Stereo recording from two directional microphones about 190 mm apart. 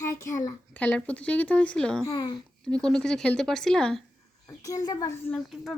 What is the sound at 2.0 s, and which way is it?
Speech, 20° left (ahead or behind).